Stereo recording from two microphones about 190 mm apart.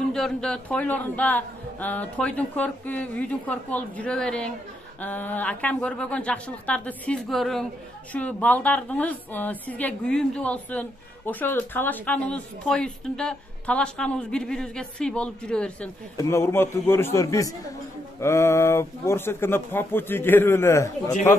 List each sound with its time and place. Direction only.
0.1 s a woman's voice: 5° left (ahead or behind)
21.1 s speech: 40° left (ahead or behind)